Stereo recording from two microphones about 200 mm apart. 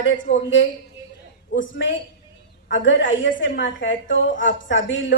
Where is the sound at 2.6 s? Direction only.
70° left (ahead or behind).